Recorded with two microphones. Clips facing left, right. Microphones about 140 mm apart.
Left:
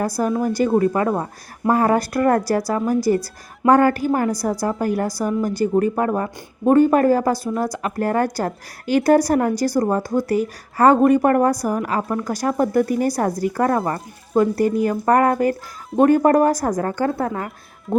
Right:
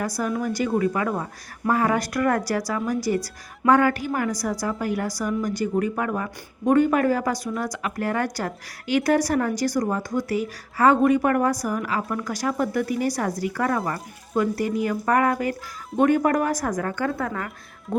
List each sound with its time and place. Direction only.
0.0 s a woman's voice: 35° left (ahead or behind)